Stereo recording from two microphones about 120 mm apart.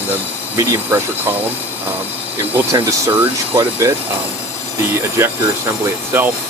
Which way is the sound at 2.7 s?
30° right (ahead or behind).